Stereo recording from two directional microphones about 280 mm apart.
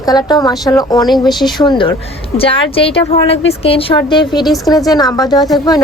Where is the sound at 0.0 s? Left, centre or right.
Centre.